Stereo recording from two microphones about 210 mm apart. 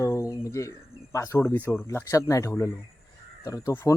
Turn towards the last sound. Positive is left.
turn(degrees=15)  # may be behind; listen again after turning